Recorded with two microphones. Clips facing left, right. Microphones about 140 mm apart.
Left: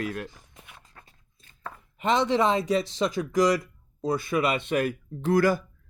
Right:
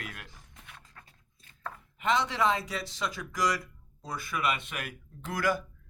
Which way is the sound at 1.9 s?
25° left (ahead or behind).